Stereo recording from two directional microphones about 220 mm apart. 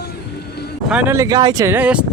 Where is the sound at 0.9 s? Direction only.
5° right (ahead or behind).